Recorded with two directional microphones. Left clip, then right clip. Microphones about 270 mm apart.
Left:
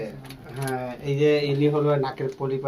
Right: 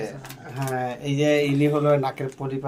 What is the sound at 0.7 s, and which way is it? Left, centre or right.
Speech, right.